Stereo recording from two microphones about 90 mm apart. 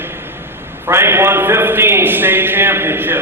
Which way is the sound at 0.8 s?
25° right (ahead or behind).